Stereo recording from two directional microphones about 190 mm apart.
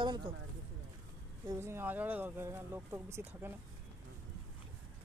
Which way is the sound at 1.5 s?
15° right (ahead or behind).